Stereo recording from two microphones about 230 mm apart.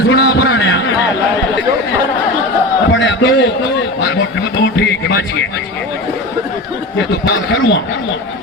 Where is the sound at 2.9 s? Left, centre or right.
Left.